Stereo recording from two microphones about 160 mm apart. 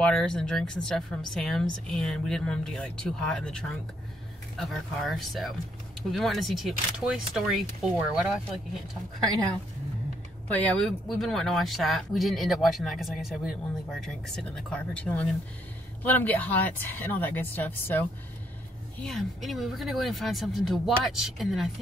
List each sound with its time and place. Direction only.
0.0 s speech: 5° left (ahead or behind)
10.6 s speech: 5° left (ahead or behind)
19.0 s speech: centre (ahead or behind)